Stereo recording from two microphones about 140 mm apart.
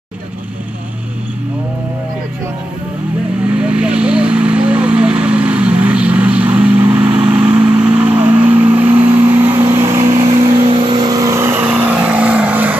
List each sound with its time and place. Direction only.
3.4 s vehicle: 10° right (ahead or behind)
10.8 s vehicle: 35° right (ahead or behind); by 12.7 s 10° right (ahead or behind)